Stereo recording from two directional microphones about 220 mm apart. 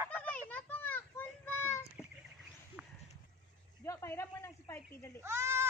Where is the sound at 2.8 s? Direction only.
5° right (ahead or behind).